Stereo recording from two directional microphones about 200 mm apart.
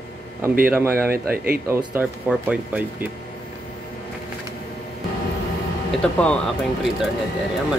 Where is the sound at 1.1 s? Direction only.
50° right (ahead or behind).